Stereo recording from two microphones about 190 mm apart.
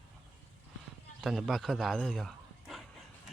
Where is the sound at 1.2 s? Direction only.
Centre (ahead or behind).